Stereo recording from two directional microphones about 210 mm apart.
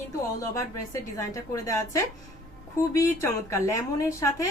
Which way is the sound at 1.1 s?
15° left (ahead or behind).